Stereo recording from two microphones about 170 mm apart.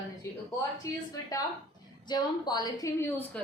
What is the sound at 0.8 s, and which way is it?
A woman's voice, 20° left (ahead or behind).